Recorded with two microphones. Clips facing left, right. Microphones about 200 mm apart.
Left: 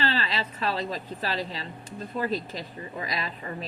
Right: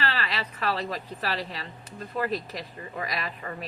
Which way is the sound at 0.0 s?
25° left (ahead or behind).